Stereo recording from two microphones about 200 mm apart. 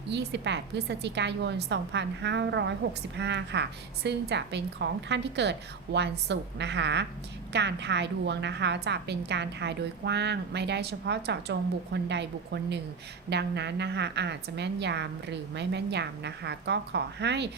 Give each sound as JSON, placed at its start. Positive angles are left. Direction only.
{"t": 0.1, "sound": "a woman's voice", "side_deg": -55}